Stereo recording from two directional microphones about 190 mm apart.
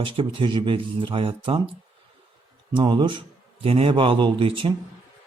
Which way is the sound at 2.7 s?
25° right (ahead or behind).